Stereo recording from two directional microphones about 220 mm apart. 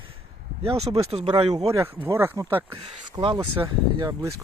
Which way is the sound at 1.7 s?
15° right (ahead or behind).